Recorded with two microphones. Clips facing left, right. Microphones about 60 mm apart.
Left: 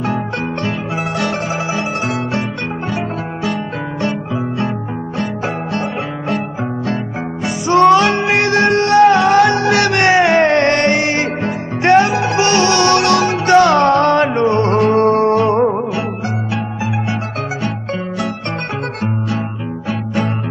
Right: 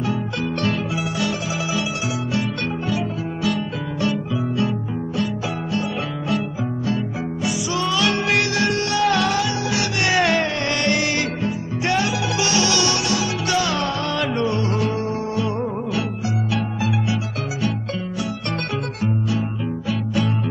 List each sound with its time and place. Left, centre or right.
5.2 s music: left
7.4 s music: left
8.1 s music: left
9.4 s music: left
10.1 s music: left
10.4 s music: left
11.4 s music: left
13.3 s music: left
14.3 s music: left
15.8 s music: left